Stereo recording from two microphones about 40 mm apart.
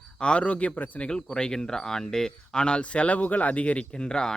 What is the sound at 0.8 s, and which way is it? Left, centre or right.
Speech, left.